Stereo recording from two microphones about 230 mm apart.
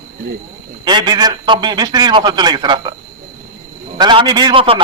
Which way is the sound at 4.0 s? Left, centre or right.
Centre.